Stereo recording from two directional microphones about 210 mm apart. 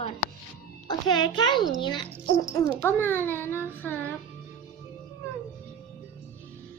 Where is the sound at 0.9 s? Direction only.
20° left (ahead or behind).